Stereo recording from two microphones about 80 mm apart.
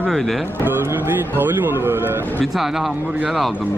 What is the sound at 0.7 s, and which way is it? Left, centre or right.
Speech, right.